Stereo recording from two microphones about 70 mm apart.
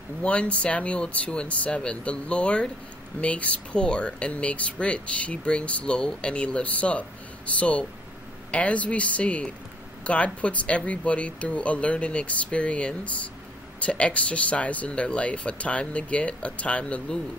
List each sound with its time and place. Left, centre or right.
0.2 s speech: centre